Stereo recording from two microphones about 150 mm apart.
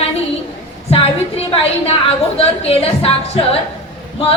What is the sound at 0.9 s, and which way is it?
Speech, 40° left (ahead or behind).